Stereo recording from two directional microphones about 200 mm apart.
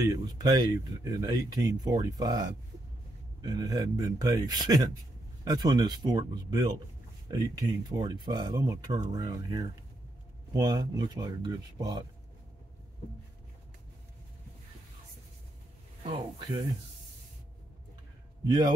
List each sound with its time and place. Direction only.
0.0 s speech: 15° right (ahead or behind)